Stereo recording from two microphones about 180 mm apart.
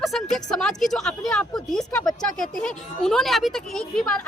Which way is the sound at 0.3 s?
5° left (ahead or behind).